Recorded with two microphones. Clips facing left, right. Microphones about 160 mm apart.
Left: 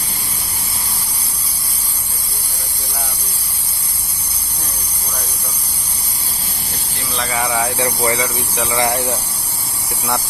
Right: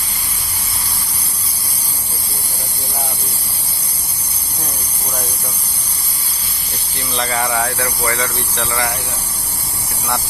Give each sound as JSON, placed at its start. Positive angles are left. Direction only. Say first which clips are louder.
{"t": 7.2, "sound": "speech", "louder": "right 1 dB", "side_deg": 5}
{"t": 7.8, "sound": "speech", "louder": "left 3 dB", "side_deg": 20}
{"t": 8.2, "sound": "speech", "louder": "left 1 dB", "side_deg": 10}